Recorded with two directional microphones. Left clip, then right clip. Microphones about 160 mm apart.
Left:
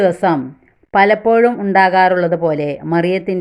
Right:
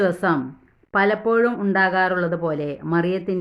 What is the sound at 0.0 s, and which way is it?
Speech, 20° left (ahead or behind).